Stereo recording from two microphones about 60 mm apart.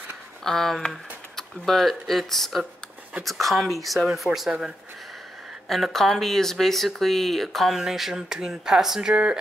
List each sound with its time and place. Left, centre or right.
0.4 s speech: centre
4.5 s speech: centre
5.7 s speech: centre
9.1 s speech: centre